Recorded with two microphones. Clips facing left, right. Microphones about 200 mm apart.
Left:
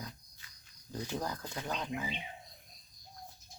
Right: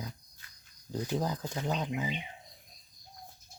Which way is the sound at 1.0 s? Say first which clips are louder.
Right 5 dB; 15° right (ahead or behind).